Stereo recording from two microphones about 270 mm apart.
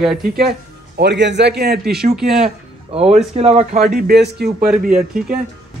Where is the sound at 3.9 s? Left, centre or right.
Right.